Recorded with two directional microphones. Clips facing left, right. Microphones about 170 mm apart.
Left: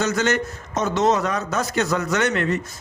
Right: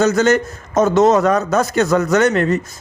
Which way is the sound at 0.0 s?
45° right (ahead or behind).